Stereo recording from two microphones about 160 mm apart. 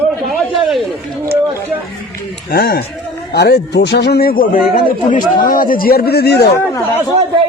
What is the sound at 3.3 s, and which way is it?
A man's voice, 90° left.